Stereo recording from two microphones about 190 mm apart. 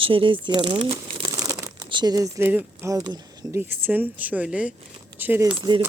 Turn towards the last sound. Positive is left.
turn(degrees=-25)  # may be behind; listen again after turning